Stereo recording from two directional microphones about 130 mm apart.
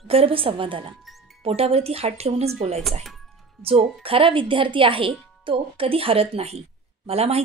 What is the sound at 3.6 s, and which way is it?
Speech, 45° right (ahead or behind).